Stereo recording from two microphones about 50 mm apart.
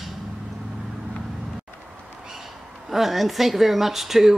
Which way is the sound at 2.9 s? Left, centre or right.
Centre.